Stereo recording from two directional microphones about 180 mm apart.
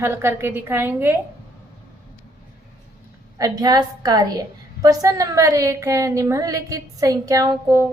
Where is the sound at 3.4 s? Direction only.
20° right (ahead or behind).